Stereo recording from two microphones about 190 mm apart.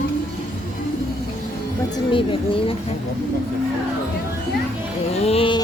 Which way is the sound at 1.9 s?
25° left (ahead or behind).